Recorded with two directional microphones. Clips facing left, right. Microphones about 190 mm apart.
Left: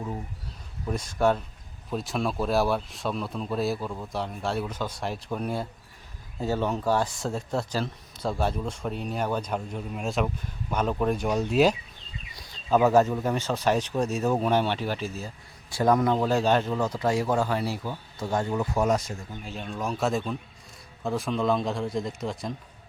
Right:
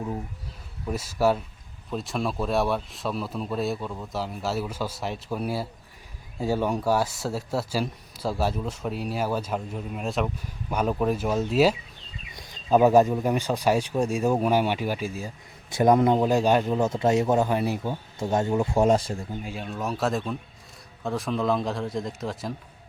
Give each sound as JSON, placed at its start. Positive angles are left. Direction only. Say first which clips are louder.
{"t": 0.9, "sound": "speech", "louder": "right 1 dB", "side_deg": -5}
{"t": 12.4, "sound": "speech", "louder": "right 3 dB", "side_deg": -15}
{"t": 16.7, "sound": "speech", "louder": "right 3 dB", "side_deg": -25}
{"t": 19.3, "sound": "speech", "louder": "right 3 dB", "side_deg": -10}